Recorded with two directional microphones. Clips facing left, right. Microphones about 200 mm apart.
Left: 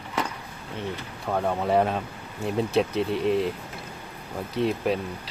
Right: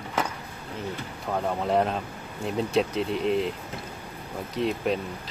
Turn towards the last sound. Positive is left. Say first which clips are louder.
# left 1 dB
turn(degrees=0)  # may be behind; listen again after turning